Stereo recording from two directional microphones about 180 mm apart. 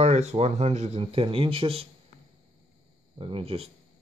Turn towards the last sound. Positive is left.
turn(degrees=-30)  # may be behind; listen again after turning